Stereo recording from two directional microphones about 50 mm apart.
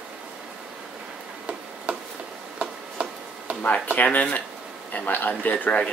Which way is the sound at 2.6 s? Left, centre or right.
Right.